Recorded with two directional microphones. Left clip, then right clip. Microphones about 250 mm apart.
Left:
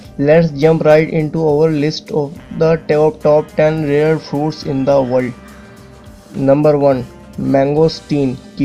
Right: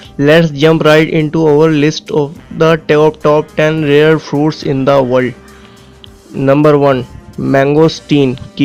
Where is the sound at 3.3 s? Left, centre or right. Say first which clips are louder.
Right 1 dB; right.